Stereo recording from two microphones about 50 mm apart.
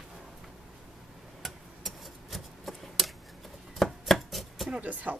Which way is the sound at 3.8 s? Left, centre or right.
Centre.